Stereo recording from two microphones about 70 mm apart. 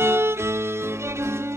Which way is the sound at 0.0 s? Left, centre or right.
Right.